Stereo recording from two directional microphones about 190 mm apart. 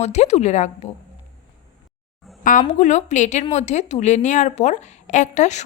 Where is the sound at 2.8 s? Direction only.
40° left (ahead or behind).